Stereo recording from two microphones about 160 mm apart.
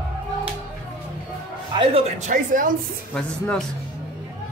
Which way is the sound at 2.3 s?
55° right (ahead or behind).